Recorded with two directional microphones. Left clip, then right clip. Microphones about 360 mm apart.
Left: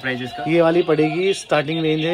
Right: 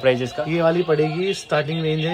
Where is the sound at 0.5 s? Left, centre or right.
Centre.